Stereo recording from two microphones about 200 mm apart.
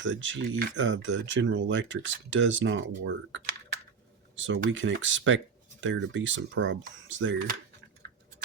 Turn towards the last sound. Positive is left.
turn(degrees=-70)  # may be behind; listen again after turning